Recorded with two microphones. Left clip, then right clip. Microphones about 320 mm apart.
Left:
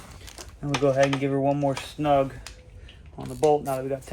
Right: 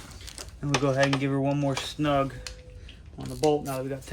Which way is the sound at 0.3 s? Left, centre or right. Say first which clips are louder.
Right 1 dB; left.